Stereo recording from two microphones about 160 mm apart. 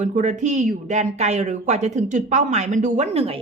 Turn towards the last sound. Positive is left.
turn(degrees=-40)  # may be behind; listen again after turning